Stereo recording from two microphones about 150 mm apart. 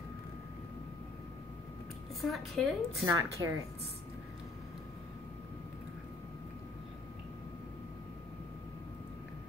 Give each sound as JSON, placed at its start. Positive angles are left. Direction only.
{"t": 2.2, "sound": "a woman's voice", "side_deg": 0}
{"t": 3.4, "sound": "a woman's voice", "side_deg": -25}